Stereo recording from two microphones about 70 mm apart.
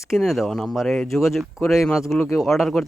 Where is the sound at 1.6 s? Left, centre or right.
Left.